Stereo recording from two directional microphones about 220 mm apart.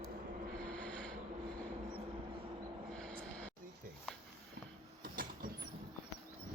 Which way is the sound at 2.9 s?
5° left (ahead or behind).